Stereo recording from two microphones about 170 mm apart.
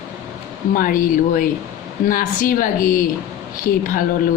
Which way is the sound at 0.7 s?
55° left (ahead or behind).